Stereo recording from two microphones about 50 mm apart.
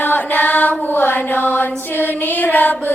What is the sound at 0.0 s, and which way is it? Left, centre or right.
Mantra, left.